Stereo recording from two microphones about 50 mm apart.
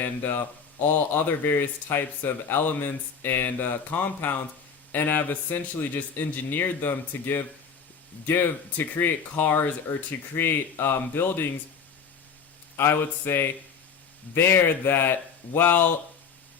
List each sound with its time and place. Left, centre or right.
0.0 s speech: left
12.7 s speech: left